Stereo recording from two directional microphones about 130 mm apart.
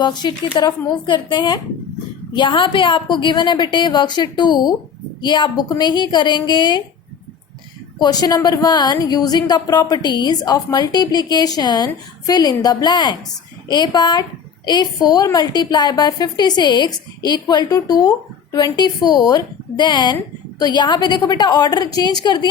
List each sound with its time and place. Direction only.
0.0 s a woman's voice: 35° left (ahead or behind)
7.9 s a woman's voice: 30° left (ahead or behind)